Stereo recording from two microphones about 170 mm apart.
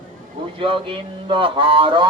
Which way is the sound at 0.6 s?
30° right (ahead or behind).